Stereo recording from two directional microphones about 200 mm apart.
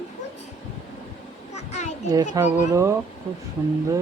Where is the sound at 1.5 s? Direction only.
35° left (ahead or behind).